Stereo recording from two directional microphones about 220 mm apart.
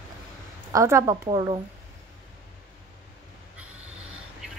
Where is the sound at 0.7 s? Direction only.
15° right (ahead or behind).